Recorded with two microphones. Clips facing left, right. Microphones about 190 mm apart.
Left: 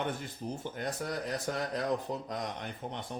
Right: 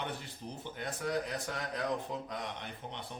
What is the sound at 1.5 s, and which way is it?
Speech, 40° left (ahead or behind).